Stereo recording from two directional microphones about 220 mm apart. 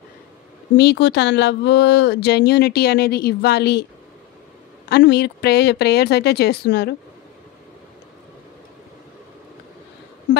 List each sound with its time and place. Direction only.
0.7 s speech: 50° left (ahead or behind)
4.8 s speech: 50° left (ahead or behind)